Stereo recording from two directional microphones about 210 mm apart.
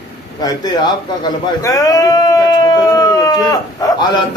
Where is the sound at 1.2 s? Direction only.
15° left (ahead or behind).